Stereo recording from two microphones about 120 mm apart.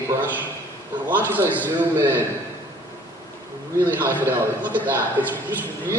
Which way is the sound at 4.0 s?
15° right (ahead or behind).